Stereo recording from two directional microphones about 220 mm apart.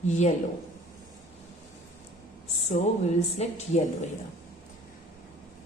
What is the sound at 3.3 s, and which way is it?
Speech, 30° left (ahead or behind).